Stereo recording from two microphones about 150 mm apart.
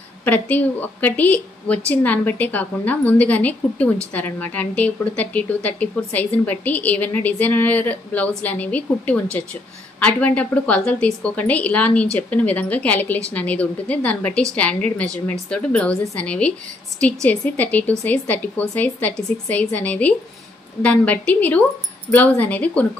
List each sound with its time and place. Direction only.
0.2 s a woman's voice: 10° left (ahead or behind)